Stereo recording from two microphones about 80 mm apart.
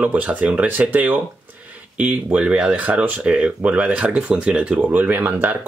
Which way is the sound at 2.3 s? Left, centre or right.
Centre.